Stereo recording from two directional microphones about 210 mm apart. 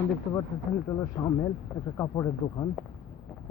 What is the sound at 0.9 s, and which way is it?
Speech, 20° left (ahead or behind).